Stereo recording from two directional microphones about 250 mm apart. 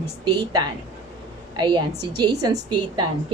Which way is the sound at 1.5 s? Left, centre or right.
Centre.